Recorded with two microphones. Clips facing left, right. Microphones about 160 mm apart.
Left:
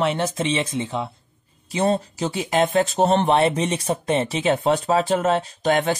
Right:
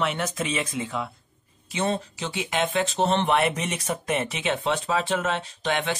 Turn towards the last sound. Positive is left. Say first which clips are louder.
# left 6 dB
turn(degrees=40)  # may be behind; listen again after turning